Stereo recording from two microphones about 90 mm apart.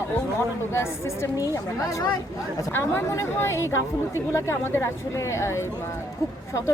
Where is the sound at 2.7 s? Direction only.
25° left (ahead or behind).